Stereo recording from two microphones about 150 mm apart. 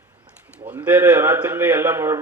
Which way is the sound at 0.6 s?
10° right (ahead or behind).